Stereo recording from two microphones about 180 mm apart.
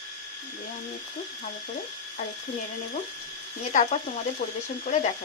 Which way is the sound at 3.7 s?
40° left (ahead or behind).